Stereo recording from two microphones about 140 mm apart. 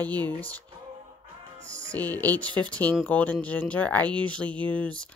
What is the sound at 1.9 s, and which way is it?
A woman's voice, 10° left (ahead or behind).